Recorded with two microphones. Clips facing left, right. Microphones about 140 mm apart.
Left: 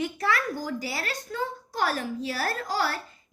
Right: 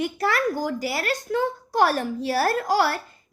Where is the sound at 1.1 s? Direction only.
80° right; by 2.3 s 60° right (ahead or behind).